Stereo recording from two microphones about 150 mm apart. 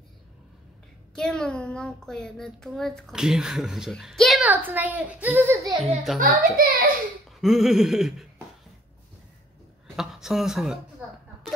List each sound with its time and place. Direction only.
1.1 s a child's voice: 5° left (ahead or behind)
4.5 s a child's voice: 10° right (ahead or behind)
6.1 s a child's voice: 60° right (ahead or behind)
7.3 s a child's voice: centre (ahead or behind)
9.9 s speech: 5° right (ahead or behind)